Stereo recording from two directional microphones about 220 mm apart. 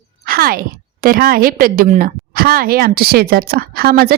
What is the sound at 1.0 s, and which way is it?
A woman's voice, 40° right (ahead or behind).